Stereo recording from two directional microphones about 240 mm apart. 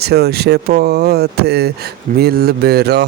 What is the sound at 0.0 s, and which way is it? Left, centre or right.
Speech, right.